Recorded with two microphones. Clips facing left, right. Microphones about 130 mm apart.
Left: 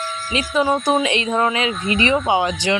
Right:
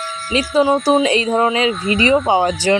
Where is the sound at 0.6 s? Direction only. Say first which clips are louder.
Right 4 dB; 20° right (ahead or behind).